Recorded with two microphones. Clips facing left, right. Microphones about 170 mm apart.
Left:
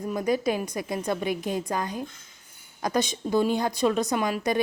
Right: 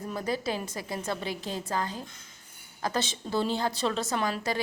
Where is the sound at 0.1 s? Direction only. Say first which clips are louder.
Left 6 dB; 15° left (ahead or behind).